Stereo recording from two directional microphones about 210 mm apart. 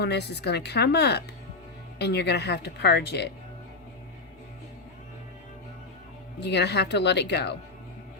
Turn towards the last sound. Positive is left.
turn(degrees=55)  # may be behind; listen again after turning